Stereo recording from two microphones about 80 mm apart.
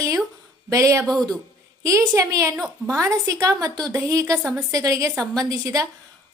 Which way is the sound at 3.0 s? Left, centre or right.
Right.